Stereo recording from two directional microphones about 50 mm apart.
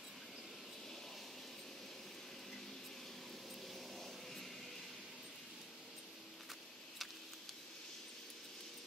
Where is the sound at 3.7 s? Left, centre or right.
Centre.